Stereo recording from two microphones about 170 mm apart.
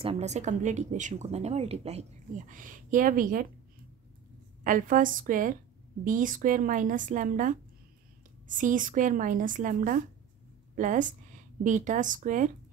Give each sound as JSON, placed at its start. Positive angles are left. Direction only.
{"t": 0.0, "sound": "speech", "side_deg": -35}
{"t": 4.6, "sound": "speech", "side_deg": -50}